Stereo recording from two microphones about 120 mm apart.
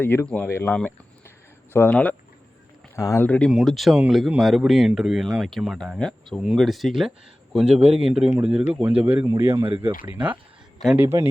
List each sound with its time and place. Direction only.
0.0 s speech: 15° left (ahead or behind)
2.9 s speech: 25° left (ahead or behind)
3.2 s speech: 10° left (ahead or behind); by 11.3 s 20° right (ahead or behind)